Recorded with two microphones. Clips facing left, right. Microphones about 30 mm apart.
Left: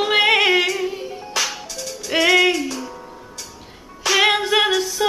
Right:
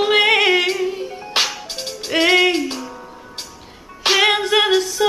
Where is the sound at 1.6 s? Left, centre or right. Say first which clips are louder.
Right 2 dB; right.